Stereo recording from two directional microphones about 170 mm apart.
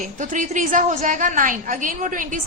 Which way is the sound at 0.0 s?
50° right (ahead or behind).